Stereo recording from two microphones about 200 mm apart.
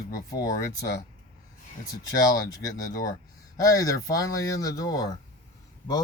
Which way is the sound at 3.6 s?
15° left (ahead or behind).